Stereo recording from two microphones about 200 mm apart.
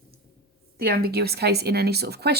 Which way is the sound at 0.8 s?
50° right (ahead or behind).